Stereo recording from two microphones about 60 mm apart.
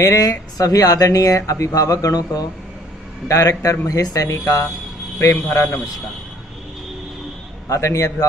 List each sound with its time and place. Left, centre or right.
0.0 s speech: left
3.3 s a man's voice: left
3.8 s speech: left
5.3 s a man's voice: left
7.6 s a man's voice: left